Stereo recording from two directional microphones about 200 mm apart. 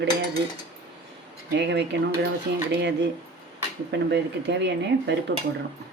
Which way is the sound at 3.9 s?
60° right (ahead or behind).